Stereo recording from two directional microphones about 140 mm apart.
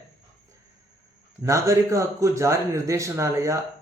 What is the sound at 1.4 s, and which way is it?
Speech, 20° right (ahead or behind).